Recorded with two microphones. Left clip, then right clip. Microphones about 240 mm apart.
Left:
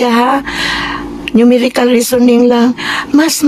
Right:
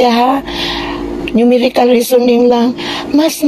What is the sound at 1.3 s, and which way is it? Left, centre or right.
A woman's voice, centre.